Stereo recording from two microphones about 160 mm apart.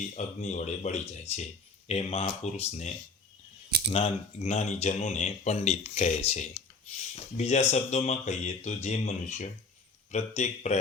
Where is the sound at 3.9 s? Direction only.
40° left (ahead or behind).